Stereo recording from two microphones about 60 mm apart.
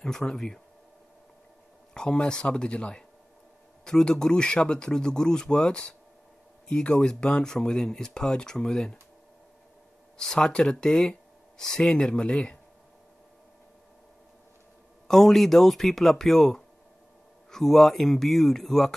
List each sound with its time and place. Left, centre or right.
0.0 s speech: centre
2.0 s speech: centre
10.1 s speech: centre
15.0 s speech: centre